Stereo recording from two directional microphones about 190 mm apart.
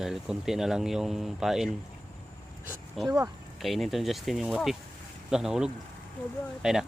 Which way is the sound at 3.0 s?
Centre (ahead or behind).